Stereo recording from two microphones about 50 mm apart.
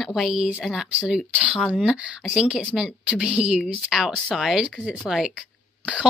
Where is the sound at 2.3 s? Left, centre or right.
Centre.